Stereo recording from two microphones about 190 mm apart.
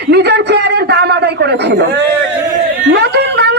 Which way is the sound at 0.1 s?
60° right (ahead or behind).